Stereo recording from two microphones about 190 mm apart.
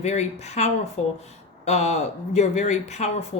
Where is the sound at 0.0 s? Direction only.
35° left (ahead or behind).